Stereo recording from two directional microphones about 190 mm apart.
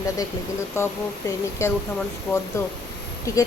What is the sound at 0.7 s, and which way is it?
A woman's voice, 15° left (ahead or behind).